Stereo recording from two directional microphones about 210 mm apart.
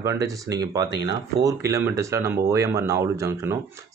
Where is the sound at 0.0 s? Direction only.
15° right (ahead or behind).